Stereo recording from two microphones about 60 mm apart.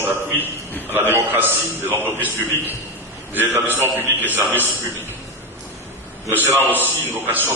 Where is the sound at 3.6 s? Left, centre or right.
Right.